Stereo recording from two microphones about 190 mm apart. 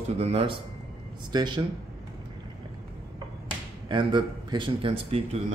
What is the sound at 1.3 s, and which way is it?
Speech, 25° right (ahead or behind).